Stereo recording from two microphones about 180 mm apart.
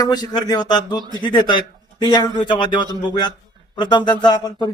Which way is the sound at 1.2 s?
25° left (ahead or behind).